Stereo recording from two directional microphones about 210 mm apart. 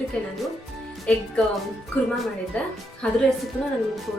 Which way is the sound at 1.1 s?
5° left (ahead or behind).